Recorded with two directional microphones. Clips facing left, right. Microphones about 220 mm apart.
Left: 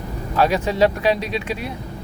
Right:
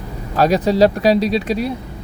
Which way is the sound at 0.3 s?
40° right (ahead or behind).